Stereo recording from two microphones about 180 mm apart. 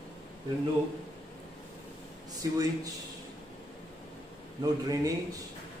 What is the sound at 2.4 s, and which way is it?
Speech, 20° right (ahead or behind).